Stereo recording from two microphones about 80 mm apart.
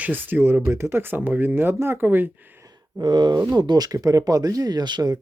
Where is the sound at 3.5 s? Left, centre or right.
Right.